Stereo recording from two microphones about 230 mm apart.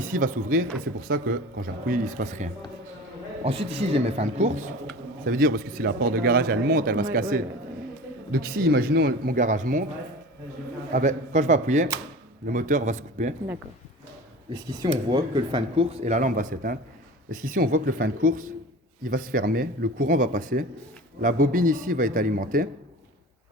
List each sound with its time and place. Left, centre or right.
0.0 s speech: right
10.9 s speech: right
14.5 s speech: centre; by 22.7 s right